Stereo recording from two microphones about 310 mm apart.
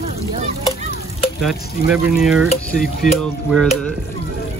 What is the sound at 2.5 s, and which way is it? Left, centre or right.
Speech, left.